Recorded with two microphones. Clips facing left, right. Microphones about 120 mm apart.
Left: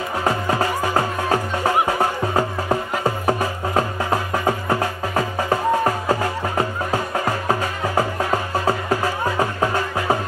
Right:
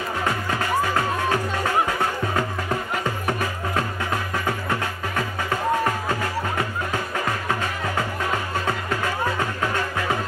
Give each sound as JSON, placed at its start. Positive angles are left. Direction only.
{"t": 0.2, "sound": "music", "side_deg": 30}